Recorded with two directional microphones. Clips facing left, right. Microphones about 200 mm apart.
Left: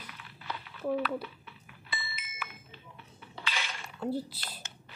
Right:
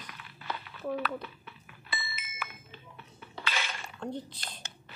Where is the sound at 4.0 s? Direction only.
5° left (ahead or behind).